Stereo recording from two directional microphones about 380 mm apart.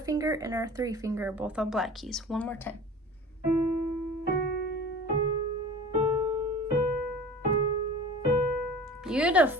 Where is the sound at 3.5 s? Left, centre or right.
Right.